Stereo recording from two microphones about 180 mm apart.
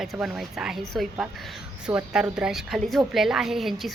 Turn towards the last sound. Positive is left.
turn(degrees=0)  # may be behind; listen again after turning